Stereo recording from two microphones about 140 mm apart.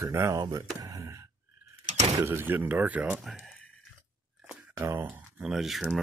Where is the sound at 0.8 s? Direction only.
25° right (ahead or behind).